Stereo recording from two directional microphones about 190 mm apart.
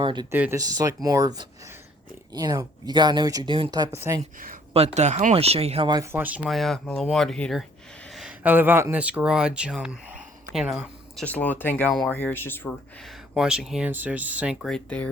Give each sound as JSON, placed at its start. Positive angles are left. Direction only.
{"t": 0.0, "sound": "speech", "side_deg": -25}
{"t": 0.3, "sound": "speech", "side_deg": -10}
{"t": 4.2, "sound": "speech", "side_deg": -45}
{"t": 4.7, "sound": "speech", "side_deg": -35}
{"t": 13.3, "sound": "speech", "side_deg": -5}